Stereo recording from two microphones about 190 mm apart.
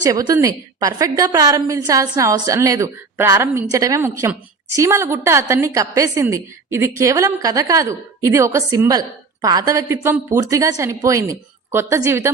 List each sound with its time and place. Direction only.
0.0 s a woman's voice: 20° right (ahead or behind)